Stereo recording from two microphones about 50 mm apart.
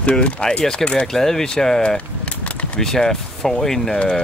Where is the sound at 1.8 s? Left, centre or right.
Left.